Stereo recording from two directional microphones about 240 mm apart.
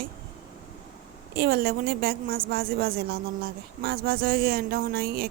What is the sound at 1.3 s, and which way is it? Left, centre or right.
A woman's voice, right.